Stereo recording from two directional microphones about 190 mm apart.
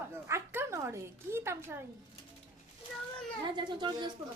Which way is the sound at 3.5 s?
25° right (ahead or behind).